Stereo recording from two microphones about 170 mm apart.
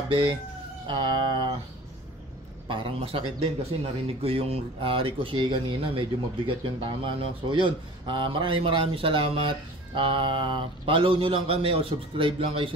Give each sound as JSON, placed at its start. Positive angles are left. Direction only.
{"t": 0.1, "sound": "a man's voice", "side_deg": -30}
{"t": 0.8, "sound": "a sound", "side_deg": -25}
{"t": 2.7, "sound": "a man's voice", "side_deg": -30}